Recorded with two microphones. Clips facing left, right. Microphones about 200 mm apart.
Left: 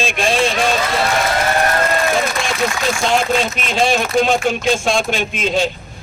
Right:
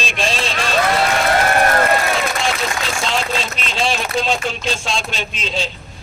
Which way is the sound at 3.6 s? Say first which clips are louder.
Left 5 dB; 50° left (ahead or behind).